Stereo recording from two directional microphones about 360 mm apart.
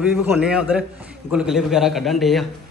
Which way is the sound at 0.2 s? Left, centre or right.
Centre.